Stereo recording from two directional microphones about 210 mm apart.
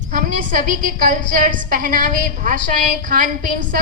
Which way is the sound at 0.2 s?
40° right (ahead or behind).